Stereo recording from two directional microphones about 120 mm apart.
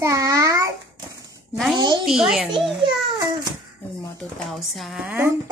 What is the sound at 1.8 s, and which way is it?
Speech, 40° right (ahead or behind).